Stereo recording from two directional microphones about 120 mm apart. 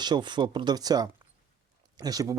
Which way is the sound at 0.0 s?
40° right (ahead or behind).